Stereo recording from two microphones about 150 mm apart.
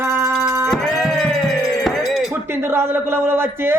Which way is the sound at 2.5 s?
15° right (ahead or behind).